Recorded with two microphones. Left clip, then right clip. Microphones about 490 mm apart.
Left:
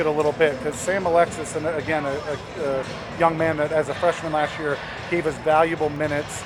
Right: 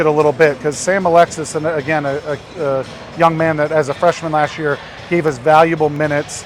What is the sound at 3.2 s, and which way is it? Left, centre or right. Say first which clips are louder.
Speech: right 7 dB; right.